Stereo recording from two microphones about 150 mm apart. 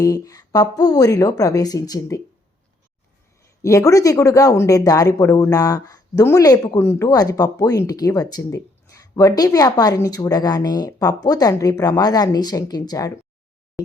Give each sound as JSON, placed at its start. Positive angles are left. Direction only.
{"t": 0.0, "sound": "speech", "side_deg": 25}
{"t": 3.6, "sound": "speech", "side_deg": 20}